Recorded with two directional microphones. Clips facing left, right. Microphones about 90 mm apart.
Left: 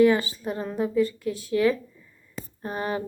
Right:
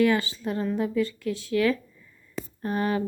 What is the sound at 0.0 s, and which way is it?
Speech, 25° left (ahead or behind).